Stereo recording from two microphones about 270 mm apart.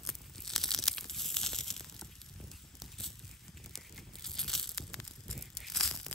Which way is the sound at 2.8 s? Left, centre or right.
Centre.